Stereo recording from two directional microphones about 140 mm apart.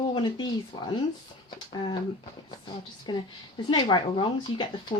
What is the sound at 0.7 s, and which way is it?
Speech, 40° left (ahead or behind).